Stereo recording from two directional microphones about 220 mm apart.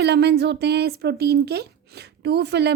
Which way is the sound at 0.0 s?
50° right (ahead or behind).